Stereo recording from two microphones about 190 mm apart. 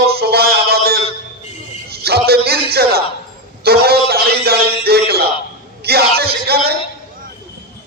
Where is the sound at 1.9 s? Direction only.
55° right (ahead or behind).